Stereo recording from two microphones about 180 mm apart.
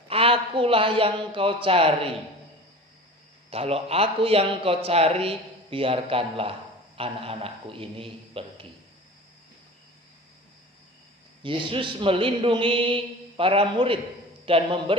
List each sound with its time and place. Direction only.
0.1 s a man's voice: 30° right (ahead or behind)
3.5 s a man's voice: 35° right (ahead or behind)
11.4 s a man's voice: 30° right (ahead or behind)